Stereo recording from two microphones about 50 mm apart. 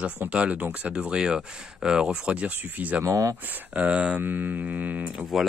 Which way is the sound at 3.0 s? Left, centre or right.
Right.